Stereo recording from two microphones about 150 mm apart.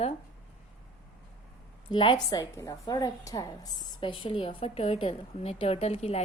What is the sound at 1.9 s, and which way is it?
A woman's voice, 30° left (ahead or behind).